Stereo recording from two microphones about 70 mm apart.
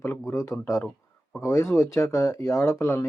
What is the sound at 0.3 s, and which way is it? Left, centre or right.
Speech, left.